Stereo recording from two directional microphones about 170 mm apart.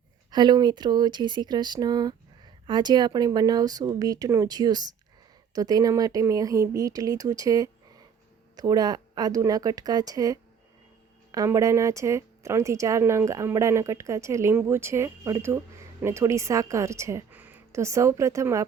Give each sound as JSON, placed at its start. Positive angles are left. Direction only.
{"t": 0.3, "sound": "speech", "side_deg": -25}